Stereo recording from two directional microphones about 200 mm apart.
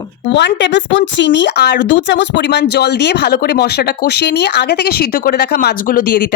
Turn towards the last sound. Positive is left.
turn(degrees=50)  # may be behind; listen again after turning